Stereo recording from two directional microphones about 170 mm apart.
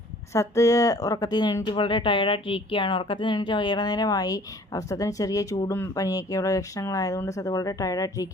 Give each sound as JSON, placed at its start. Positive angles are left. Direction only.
{"t": 0.3, "sound": "speech", "side_deg": 20}